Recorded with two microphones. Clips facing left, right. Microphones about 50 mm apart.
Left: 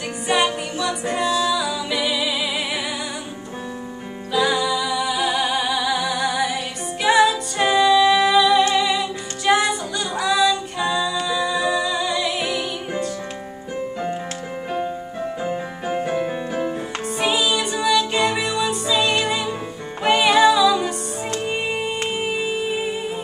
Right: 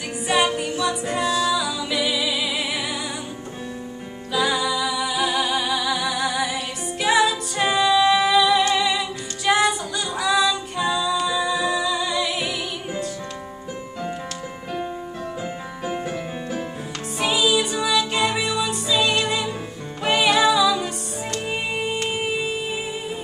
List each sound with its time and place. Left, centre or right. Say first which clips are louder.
0.3 s music: left 1 dB; centre
1.2 s music: left 1 dB; left
1.6 s music: left 1 dB; centre
4.3 s music: left 2 dB; centre
15.4 s music: left 4 dB; centre
22.2 s music: left 2 dB; centre